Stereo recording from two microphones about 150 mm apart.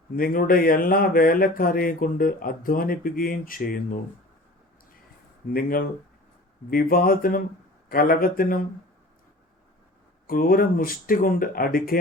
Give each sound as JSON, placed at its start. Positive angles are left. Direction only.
{"t": 0.2, "sound": "speech", "side_deg": 75}
{"t": 5.5, "sound": "speech", "side_deg": 75}
{"t": 10.2, "sound": "speech", "side_deg": 70}